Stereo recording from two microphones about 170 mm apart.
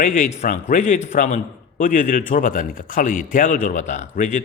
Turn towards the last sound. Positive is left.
turn(degrees=45)  # may be behind; listen again after turning